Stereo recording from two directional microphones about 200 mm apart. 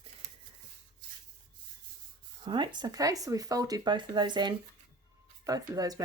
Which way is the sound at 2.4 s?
25° right (ahead or behind).